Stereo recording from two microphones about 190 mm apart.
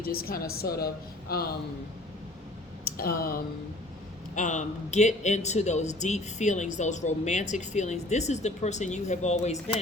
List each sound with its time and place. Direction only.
0.0 s a woman's voice: 50° left (ahead or behind)
2.8 s speech: 50° left (ahead or behind)
4.4 s a man's voice: 40° left (ahead or behind)